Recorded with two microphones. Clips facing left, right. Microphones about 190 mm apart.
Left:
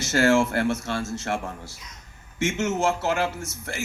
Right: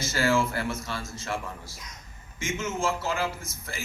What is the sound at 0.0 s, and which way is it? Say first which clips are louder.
Speech: left 5 dB; 75° left (ahead or behind).